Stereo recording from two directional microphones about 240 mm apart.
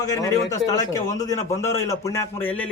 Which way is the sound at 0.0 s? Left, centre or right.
Centre.